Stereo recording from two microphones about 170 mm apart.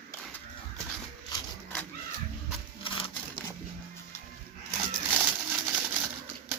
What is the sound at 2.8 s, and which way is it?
Crumpling, 30° left (ahead or behind).